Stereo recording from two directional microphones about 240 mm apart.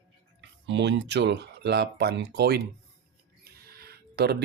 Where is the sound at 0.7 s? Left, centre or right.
Right.